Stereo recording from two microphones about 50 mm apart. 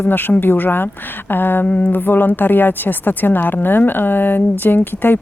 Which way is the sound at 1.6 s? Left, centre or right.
Left.